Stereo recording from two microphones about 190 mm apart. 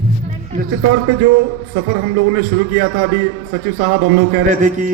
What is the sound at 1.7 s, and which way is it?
A man's voice, 55° right (ahead or behind).